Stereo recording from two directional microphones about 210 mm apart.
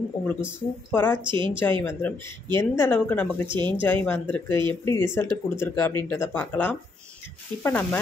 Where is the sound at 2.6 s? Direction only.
10° left (ahead or behind).